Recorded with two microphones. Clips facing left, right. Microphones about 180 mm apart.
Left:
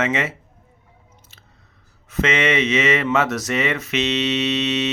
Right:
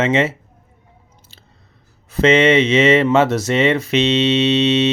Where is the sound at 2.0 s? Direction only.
30° right (ahead or behind).